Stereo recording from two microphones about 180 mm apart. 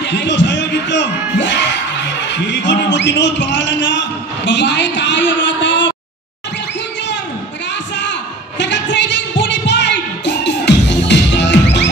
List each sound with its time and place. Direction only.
0.0 s a man's voice: 75° left (ahead or behind)
8.0 s music: 75° left (ahead or behind)